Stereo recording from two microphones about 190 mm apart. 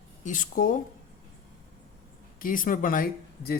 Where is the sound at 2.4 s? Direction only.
45° left (ahead or behind).